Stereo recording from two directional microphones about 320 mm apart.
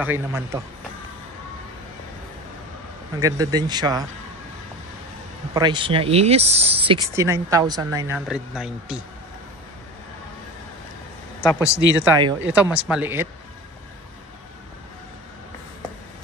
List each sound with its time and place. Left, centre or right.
0.0 s a woman's voice: centre
3.2 s a woman's voice: centre
5.5 s a woman's voice: centre
11.4 s speech: centre
12.0 s a woman's voice: centre